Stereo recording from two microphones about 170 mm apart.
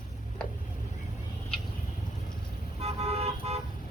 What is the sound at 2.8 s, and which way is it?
Car, 35° right (ahead or behind).